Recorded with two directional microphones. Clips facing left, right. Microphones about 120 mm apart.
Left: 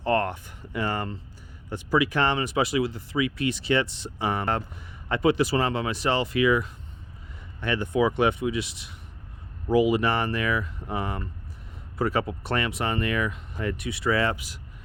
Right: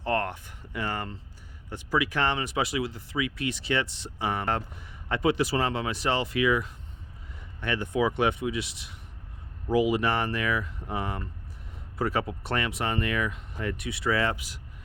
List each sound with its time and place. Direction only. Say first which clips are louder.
0.0 s a sound: left 4 dB; 40° left (ahead or behind)
1.7 s speech: left 4 dB; 30° left (ahead or behind)
9.7 s speech: left 3 dB; 35° left (ahead or behind)